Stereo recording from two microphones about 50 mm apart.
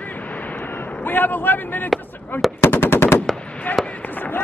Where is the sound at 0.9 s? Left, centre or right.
Left.